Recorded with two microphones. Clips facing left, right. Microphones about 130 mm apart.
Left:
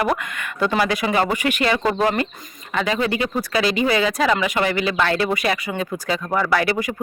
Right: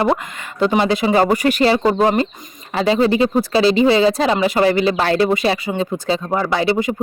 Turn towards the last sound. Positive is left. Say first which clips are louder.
# right 3 dB
turn(degrees=-25)  # may be behind; listen again after turning